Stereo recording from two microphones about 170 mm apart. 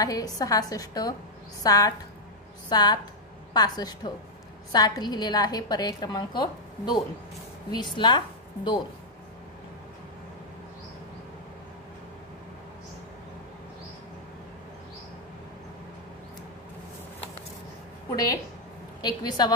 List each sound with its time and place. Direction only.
0.0 s a woman's voice: 20° left (ahead or behind)
18.1 s a woman's voice: 20° left (ahead or behind)